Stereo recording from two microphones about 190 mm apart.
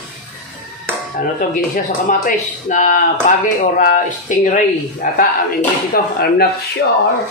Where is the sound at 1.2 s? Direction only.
45° left (ahead or behind).